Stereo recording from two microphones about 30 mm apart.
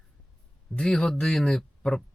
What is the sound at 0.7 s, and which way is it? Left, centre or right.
Speech, left.